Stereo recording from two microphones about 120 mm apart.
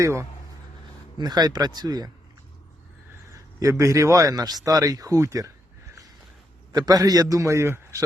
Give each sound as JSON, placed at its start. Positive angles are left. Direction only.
{"t": 0.0, "sound": "speech", "side_deg": -25}
{"t": 1.2, "sound": "speech", "side_deg": -35}
{"t": 3.6, "sound": "speech", "side_deg": -25}
{"t": 6.7, "sound": "speech", "side_deg": -35}